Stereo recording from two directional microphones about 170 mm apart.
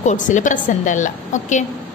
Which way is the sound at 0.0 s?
45° left (ahead or behind).